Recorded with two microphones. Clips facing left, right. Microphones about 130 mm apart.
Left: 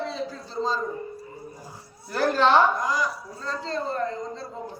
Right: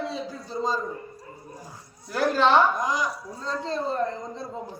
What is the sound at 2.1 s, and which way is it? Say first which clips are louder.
Speech: even; centre (ahead or behind).